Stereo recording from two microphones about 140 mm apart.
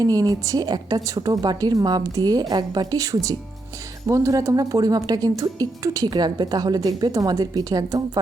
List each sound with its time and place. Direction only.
0.0 s a woman's voice: 25° right (ahead or behind)